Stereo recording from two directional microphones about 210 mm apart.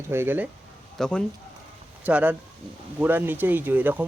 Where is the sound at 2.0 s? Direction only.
5° right (ahead or behind).